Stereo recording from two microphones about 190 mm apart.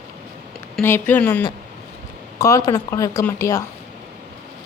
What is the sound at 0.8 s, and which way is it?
Speech, 10° left (ahead or behind).